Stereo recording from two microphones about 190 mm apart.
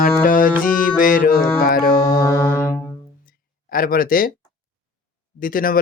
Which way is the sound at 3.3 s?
50° left (ahead or behind).